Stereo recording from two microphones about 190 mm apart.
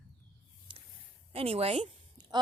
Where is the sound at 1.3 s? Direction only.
30° right (ahead or behind).